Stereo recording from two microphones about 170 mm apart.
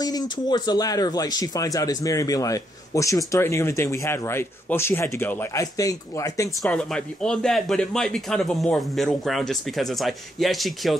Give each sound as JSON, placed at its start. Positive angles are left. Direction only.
{"t": 0.0, "sound": "speech", "side_deg": 25}
{"t": 6.6, "sound": "speech", "side_deg": 5}